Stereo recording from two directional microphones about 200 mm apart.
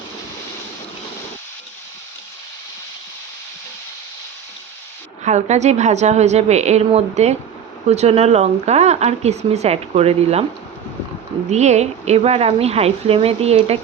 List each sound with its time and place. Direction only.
5.2 s speech: 35° right (ahead or behind)
11.4 s speech: 35° right (ahead or behind)